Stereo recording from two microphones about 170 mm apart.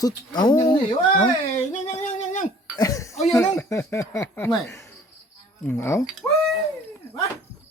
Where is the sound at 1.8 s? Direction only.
40° left (ahead or behind).